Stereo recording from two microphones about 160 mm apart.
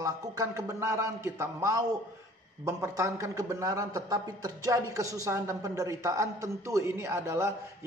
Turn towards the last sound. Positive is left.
turn(degrees=-15)  # may be behind; listen again after turning